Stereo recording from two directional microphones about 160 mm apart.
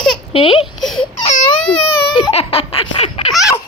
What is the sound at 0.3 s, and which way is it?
Speech, 30° left (ahead or behind).